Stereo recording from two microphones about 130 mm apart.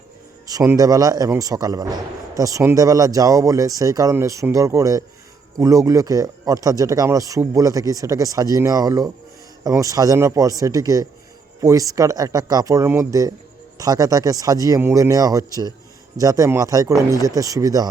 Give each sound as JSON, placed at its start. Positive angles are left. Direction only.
{"t": 0.4, "sound": "speech", "side_deg": -25}